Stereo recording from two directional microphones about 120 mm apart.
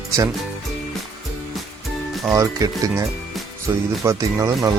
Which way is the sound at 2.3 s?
25° right (ahead or behind).